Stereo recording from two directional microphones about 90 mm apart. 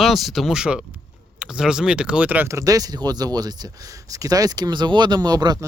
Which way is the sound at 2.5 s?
40° right (ahead or behind).